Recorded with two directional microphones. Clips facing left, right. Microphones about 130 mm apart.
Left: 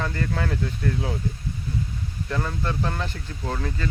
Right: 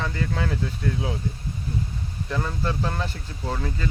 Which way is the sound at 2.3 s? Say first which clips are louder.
Even; 5° right (ahead or behind).